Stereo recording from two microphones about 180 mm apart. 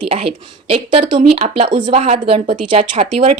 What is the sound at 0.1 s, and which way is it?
Speech, 35° right (ahead or behind).